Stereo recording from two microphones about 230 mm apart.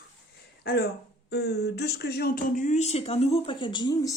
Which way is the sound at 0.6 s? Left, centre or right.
Left.